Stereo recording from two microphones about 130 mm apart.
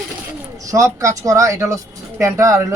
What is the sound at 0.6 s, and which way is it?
Speech, 25° right (ahead or behind).